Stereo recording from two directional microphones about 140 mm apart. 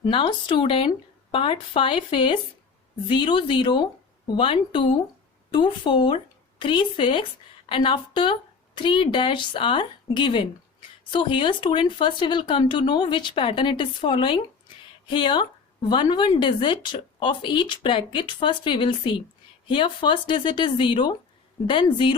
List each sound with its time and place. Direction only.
0.0 s speech: 35° left (ahead or behind)